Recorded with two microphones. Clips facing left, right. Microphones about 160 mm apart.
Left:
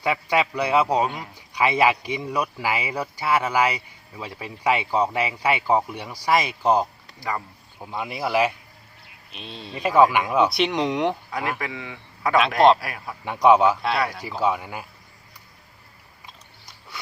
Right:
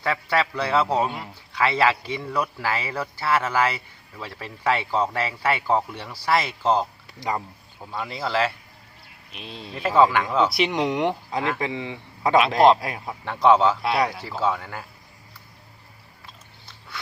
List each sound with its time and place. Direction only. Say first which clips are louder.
0.0 s a man's voice: left 1 dB; 15° left (ahead or behind)
7.2 s speech: right 2 dB; 20° right (ahead or behind)
7.8 s a man's voice: left 2 dB; 15° left (ahead or behind)
9.3 s speech: even; centre (ahead or behind)
9.7 s a man's voice: left 1 dB; 15° left (ahead or behind)
10.5 s speech: even; centre (ahead or behind)
11.5 s speech: right 4 dB; 25° right (ahead or behind)
13.2 s a man's voice: left 1 dB; 15° left (ahead or behind)